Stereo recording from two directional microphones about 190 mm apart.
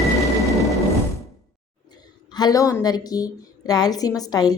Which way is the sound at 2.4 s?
20° left (ahead or behind).